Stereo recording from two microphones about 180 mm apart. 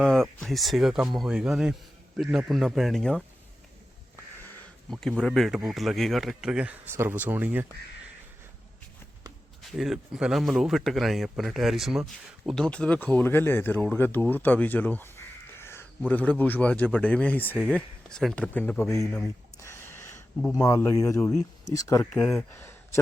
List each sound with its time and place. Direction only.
0.0 s speech: 5° left (ahead or behind)
4.9 s speech: centre (ahead or behind)
9.7 s speech: centre (ahead or behind); by 19.1 s 15° left (ahead or behind)
19.5 s a sound: 15° left (ahead or behind)
21.7 s speech: 20° left (ahead or behind)
22.1 s speech: 5° left (ahead or behind)
22.5 s a sound: 15° left (ahead or behind)